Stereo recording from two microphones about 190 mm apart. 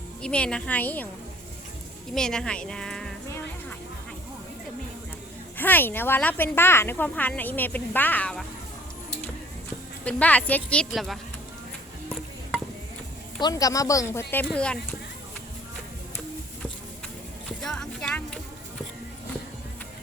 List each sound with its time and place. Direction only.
0.2 s speech: 5° left (ahead or behind)
2.1 s speech: 5° left (ahead or behind)
3.2 s music: 15° left (ahead or behind)
5.5 s speech: 10° left (ahead or behind)
10.0 s speech: 5° left (ahead or behind)
12.0 s music: 5° left (ahead or behind)
13.4 s speech: 20° left (ahead or behind)
17.6 s music: 5° left (ahead or behind)